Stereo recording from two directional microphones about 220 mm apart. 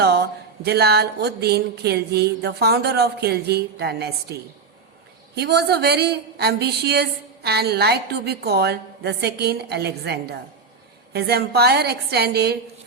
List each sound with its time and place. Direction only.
0.6 s a woman's voice: 45° right (ahead or behind)